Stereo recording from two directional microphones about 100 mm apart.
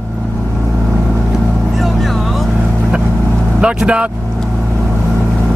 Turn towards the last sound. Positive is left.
turn(degrees=-10)  # may be behind; listen again after turning